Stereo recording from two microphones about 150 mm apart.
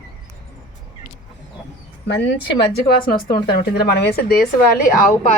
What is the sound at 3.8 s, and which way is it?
Speech, 90° left.